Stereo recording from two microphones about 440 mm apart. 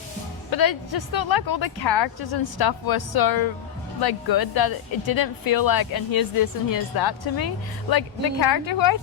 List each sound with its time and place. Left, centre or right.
0.5 s a woman's voice: left